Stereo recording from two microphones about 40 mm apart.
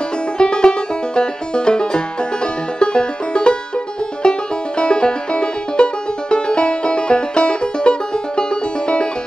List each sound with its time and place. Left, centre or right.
0.4 s music: left